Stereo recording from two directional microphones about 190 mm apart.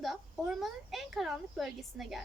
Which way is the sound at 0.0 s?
Centre (ahead or behind).